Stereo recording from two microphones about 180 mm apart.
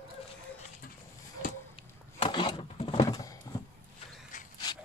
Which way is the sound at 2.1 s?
30° left (ahead or behind).